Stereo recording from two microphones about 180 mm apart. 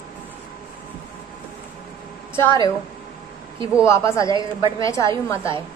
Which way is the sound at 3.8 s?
15° left (ahead or behind).